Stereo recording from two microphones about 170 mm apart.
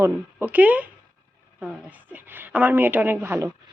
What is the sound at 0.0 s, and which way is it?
A woman's voice, 10° right (ahead or behind).